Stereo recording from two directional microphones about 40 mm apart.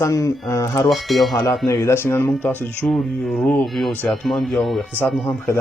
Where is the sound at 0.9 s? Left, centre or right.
Centre.